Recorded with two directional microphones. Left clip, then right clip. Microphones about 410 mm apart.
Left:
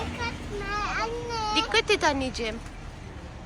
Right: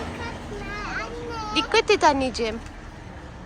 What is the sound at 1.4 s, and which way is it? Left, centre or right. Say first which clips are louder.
Speech: right 3 dB; centre.